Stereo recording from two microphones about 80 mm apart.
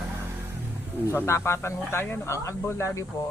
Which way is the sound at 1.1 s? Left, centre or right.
Left.